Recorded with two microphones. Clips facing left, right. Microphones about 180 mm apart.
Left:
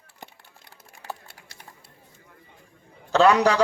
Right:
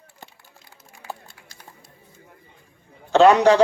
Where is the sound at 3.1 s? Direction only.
30° right (ahead or behind).